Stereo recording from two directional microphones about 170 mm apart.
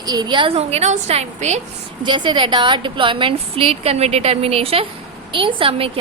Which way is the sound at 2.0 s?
25° right (ahead or behind).